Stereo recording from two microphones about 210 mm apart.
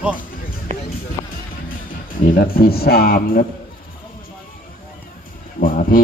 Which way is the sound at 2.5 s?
45° left (ahead or behind).